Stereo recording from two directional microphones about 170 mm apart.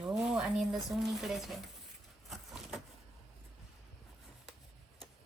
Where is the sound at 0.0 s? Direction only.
5° right (ahead or behind).